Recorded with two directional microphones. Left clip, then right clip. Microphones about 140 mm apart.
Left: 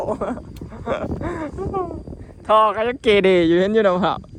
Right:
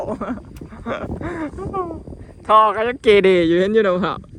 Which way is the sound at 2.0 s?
60° right (ahead or behind).